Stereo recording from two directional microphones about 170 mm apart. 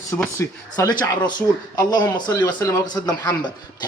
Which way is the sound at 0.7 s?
20° left (ahead or behind).